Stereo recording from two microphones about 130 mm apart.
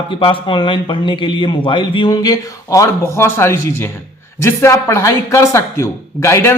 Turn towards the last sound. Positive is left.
turn(degrees=20)  # may be behind; listen again after turning